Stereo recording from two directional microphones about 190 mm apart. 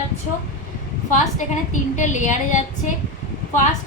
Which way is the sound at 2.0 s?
40° left (ahead or behind).